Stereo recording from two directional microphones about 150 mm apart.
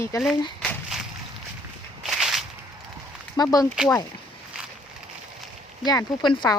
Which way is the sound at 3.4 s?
25° left (ahead or behind).